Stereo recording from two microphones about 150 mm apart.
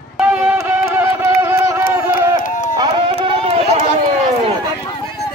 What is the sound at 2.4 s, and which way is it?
Run, 60° left (ahead or behind).